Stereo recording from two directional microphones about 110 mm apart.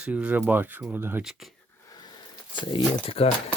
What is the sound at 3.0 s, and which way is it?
Speech, 65° left (ahead or behind).